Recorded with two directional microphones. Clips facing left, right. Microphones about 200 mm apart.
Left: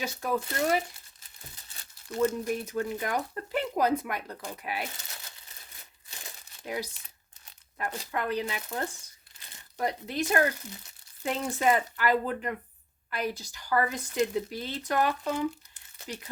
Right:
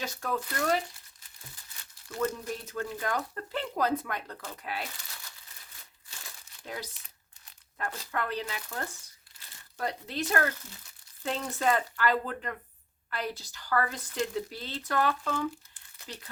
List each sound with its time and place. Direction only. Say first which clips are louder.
0.0 s speech: left 3 dB; 15° left (ahead or behind)
1.5 s crumpling: left 1 dB; 30° left (ahead or behind)
2.0 s speech: left 5 dB; 20° left (ahead or behind)
4.9 s crumpling: left 2 dB; 25° left (ahead or behind)
7.4 s speech: left 2 dB; 20° left (ahead or behind)